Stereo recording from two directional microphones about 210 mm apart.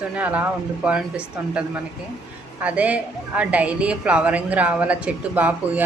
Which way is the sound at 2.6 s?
5° right (ahead or behind).